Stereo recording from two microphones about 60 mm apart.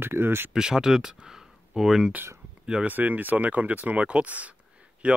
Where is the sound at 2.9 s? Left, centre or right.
Right.